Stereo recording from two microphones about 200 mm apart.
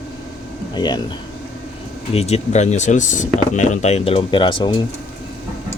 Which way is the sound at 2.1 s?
30° left (ahead or behind).